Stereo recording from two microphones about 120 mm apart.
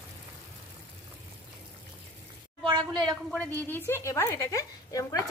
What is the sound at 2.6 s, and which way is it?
Speech, 40° right (ahead or behind).